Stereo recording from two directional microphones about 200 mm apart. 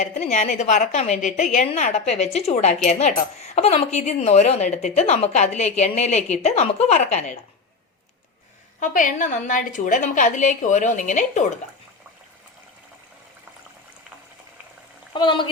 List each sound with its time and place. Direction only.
0.0 s speech: 35° left (ahead or behind)
8.8 s speech: 40° left (ahead or behind)
15.1 s speech: 25° left (ahead or behind)